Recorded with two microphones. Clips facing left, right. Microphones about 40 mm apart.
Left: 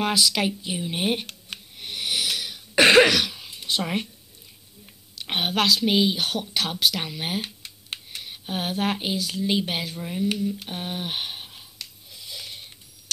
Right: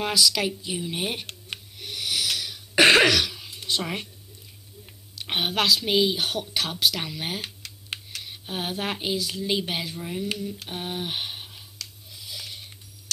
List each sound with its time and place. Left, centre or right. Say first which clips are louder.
0.0 s speech: left 1 dB; left
1.8 s wheeze: left 1 dB; left
2.7 s cough: left 2 dB; centre
3.1 s a sound: even; centre
5.2 s speech: left 1 dB; centre
12.1 s a sound: even; centre